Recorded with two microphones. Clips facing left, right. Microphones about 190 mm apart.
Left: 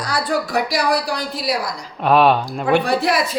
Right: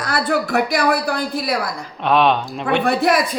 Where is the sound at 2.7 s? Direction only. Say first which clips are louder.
Even; 55° right (ahead or behind).